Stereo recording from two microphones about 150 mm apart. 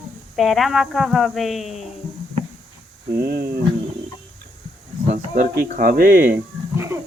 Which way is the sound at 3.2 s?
90° right.